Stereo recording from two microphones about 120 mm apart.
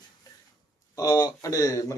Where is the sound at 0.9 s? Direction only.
30° left (ahead or behind).